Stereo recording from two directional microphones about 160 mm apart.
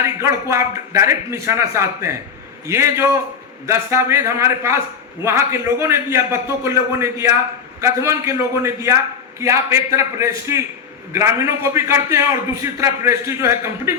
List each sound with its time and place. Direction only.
0.0 s a man's voice: 15° right (ahead or behind)